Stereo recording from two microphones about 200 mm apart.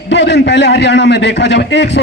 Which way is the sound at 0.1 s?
60° left (ahead or behind).